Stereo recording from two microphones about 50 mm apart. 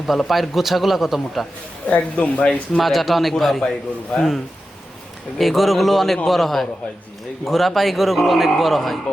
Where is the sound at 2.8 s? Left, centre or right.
Centre.